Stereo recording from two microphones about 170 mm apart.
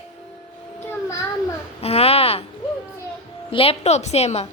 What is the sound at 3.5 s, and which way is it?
Speech, 35° left (ahead or behind).